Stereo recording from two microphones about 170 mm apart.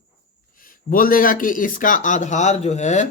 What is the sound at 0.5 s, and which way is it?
Speech, 55° left (ahead or behind).